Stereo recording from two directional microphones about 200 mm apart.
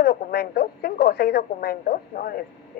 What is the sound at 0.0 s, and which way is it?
Speech, 55° left (ahead or behind).